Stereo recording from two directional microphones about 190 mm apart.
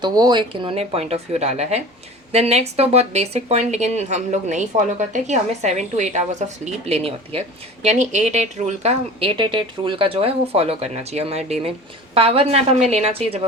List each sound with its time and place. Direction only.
0.0 s a woman's voice: 20° right (ahead or behind)